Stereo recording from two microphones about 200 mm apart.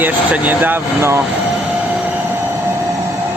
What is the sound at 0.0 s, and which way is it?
Speech, 10° right (ahead or behind).